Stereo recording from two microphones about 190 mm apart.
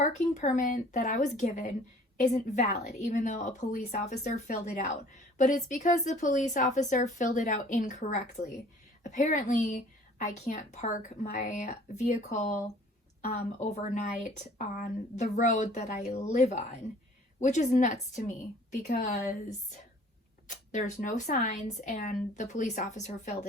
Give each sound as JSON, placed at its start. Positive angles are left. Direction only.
{"t": 0.0, "sound": "a woman's voice", "side_deg": 40}